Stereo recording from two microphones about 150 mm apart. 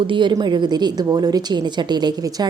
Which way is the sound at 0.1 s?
30° right (ahead or behind).